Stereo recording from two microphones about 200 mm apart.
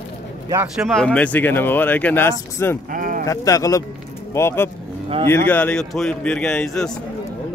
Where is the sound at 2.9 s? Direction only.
45° right (ahead or behind).